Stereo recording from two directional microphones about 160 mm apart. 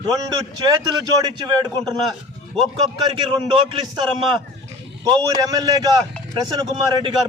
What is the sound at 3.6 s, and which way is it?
Speech, 30° right (ahead or behind).